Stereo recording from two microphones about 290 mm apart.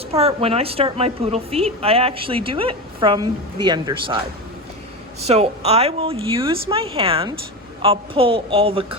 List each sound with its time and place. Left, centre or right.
0.1 s a woman's voice: right
5.2 s a woman's voice: right